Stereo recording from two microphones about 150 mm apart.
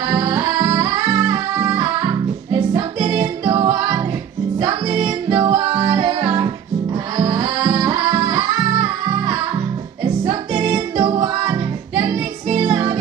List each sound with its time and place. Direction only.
0.1 s music: 35° right (ahead or behind)
10.6 s music: 30° right (ahead or behind)